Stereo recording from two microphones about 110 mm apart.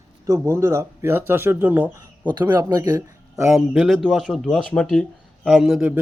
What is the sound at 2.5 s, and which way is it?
Speech, 35° right (ahead or behind).